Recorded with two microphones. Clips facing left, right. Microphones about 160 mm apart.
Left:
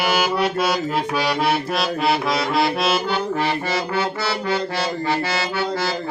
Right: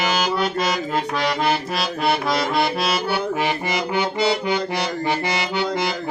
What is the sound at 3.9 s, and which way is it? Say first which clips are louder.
Accordion: right 3 dB; 15° right (ahead or behind).